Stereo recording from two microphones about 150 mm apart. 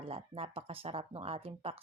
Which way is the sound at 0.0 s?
40° right (ahead or behind).